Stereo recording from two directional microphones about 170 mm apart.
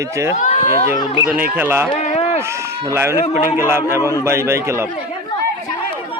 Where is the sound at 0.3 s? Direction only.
45° left (ahead or behind).